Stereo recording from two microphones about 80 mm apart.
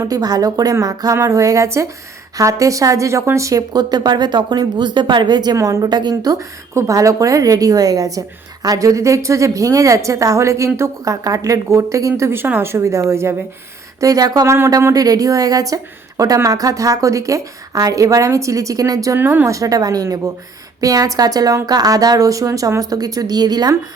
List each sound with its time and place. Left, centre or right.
0.1 s a woman's voice: right
3.9 s a woman's voice: right
5.5 s a woman's voice: right
5.8 s a woman's voice: right
6.7 s a woman's voice: right
14.0 s a woman's voice: right
14.4 s a woman's voice: right
14.9 s a woman's voice: right
19.1 s speech: right
19.5 s a woman's voice: right